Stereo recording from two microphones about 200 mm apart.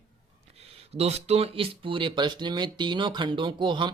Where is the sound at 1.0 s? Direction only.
30° right (ahead or behind).